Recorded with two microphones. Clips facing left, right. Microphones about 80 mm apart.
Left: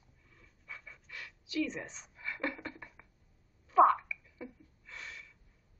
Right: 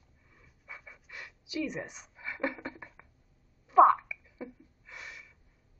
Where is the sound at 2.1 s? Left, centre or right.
Centre.